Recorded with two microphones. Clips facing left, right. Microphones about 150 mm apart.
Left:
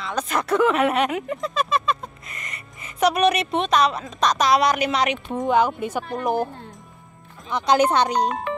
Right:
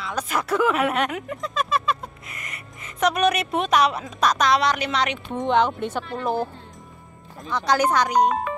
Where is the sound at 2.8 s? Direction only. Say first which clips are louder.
Left 2 dB; 5° left (ahead or behind).